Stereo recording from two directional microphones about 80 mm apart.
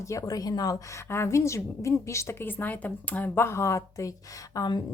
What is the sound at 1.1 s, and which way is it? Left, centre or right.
A woman's voice, left.